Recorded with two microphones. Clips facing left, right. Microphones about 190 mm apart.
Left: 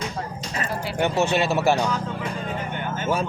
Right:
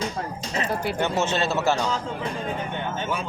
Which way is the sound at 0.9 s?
15° left (ahead or behind).